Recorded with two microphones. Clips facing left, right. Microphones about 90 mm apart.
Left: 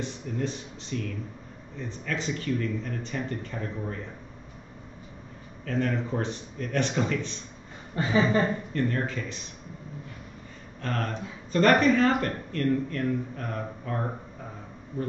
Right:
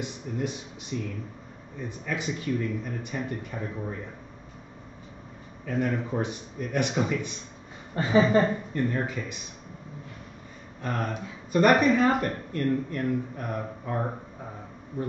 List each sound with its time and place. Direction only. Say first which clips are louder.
0.0 s speech: even; 15° right (ahead or behind)
5.7 s speech: even; 10° right (ahead or behind)
7.9 s a woman's voice: right 2 dB; 35° right (ahead or behind)
8.4 s speech: right 2 dB; 15° right (ahead or behind)
10.8 s speech: even; 10° right (ahead or behind)